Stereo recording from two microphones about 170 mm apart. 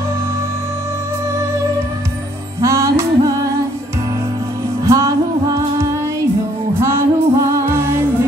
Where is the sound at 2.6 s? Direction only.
15° right (ahead or behind).